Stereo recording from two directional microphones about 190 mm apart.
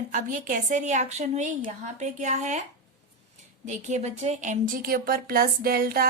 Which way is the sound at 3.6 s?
40° right (ahead or behind).